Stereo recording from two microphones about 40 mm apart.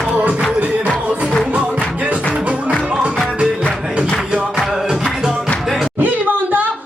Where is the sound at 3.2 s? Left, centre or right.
Centre.